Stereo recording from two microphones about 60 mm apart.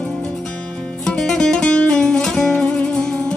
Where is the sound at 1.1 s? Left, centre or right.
Centre.